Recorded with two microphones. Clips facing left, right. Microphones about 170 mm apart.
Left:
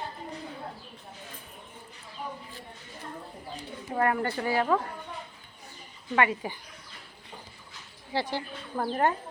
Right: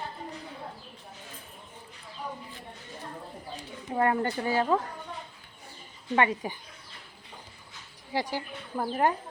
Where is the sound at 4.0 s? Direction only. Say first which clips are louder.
Right 1 dB; 25° right (ahead or behind).